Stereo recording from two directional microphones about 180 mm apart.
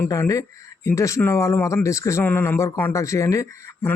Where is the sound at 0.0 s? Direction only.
15° left (ahead or behind).